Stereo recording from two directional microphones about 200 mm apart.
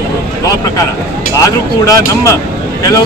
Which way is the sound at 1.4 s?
15° left (ahead or behind).